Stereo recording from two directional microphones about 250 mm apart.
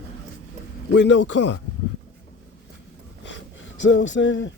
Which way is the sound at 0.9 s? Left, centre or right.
Left.